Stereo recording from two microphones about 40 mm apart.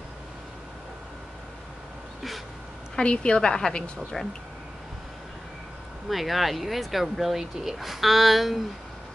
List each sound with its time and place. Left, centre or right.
3.0 s a woman's voice: left
4.2 s speech: centre
6.0 s speech: centre